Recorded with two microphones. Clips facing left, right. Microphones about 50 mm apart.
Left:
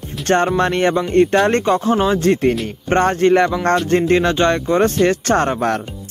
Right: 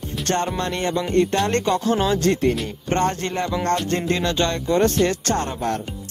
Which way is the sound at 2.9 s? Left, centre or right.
Left.